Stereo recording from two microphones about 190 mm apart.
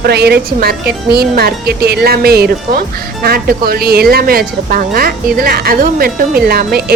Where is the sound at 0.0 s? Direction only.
60° right (ahead or behind).